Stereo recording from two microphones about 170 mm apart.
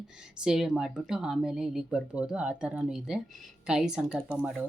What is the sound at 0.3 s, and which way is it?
Speech, 5° right (ahead or behind).